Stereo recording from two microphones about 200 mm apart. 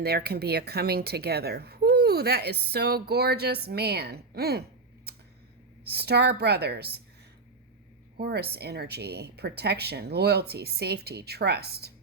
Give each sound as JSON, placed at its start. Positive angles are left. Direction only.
{"t": 0.0, "sound": "a woman's voice", "side_deg": -50}
{"t": 5.9, "sound": "a woman's voice", "side_deg": -55}
{"t": 8.2, "sound": "a woman's voice", "side_deg": -55}